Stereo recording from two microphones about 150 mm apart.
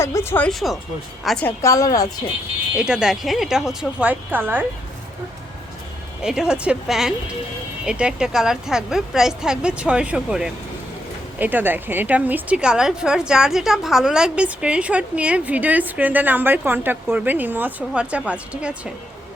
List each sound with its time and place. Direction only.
0.0 s speech: 15° left (ahead or behind)
1.2 s a woman's voice: centre (ahead or behind)
1.5 s a woman's voice: 20° left (ahead or behind)
2.7 s a woman's voice: 5° right (ahead or behind)
6.2 s a woman's voice: 5° right (ahead or behind)